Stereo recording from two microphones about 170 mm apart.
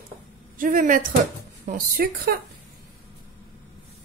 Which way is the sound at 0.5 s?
55° right (ahead or behind).